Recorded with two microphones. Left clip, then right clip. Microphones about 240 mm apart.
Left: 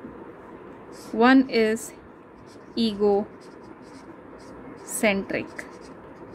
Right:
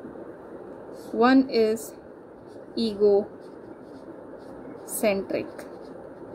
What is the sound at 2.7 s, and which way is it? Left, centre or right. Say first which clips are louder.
Speech: right 1 dB; left.